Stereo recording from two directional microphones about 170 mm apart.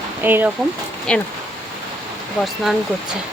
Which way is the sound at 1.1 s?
5° left (ahead or behind).